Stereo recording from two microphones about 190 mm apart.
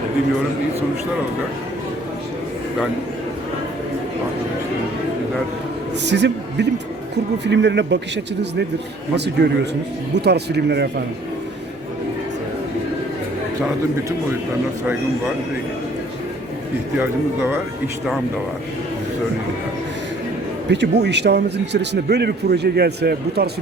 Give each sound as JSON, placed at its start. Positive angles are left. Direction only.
{"t": 6.1, "sound": "a man's voice", "side_deg": -65}
{"t": 20.7, "sound": "speech", "side_deg": -65}